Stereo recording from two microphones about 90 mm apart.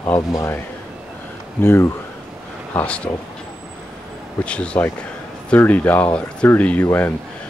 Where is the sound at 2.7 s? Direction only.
15° left (ahead or behind).